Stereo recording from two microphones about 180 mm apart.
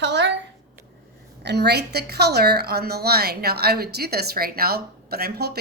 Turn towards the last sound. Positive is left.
turn(degrees=-60)  # may be behind; listen again after turning